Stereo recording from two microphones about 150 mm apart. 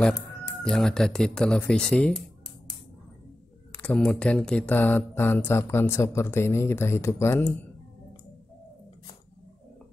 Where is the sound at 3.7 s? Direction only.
10° left (ahead or behind).